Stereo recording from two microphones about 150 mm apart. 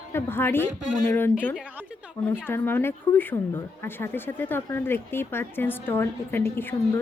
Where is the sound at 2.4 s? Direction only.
15° left (ahead or behind).